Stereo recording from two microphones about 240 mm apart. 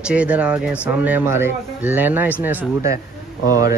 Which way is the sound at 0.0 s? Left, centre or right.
Centre.